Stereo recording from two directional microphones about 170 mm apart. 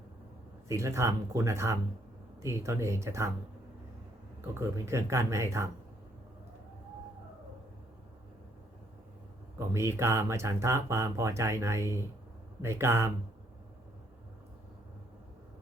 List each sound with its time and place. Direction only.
0.7 s speech: 15° right (ahead or behind)
4.4 s speech: 15° right (ahead or behind)
9.6 s speech: 15° right (ahead or behind)